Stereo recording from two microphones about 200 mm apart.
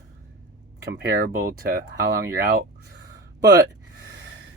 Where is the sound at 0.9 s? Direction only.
45° right (ahead or behind).